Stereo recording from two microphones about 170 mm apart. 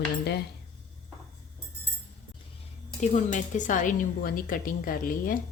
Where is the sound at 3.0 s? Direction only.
45° left (ahead or behind).